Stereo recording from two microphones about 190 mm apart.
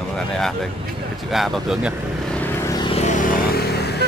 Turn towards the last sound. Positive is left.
turn(degrees=60)  # may be behind; listen again after turning